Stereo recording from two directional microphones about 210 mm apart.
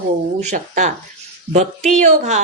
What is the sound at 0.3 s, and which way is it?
Speech, 35° right (ahead or behind).